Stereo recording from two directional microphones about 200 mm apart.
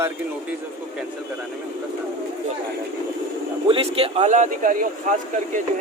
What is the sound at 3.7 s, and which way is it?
Speech, 30° right (ahead or behind).